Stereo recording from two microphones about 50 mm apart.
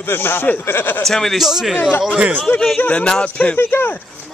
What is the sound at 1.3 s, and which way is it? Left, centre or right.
Speech, centre.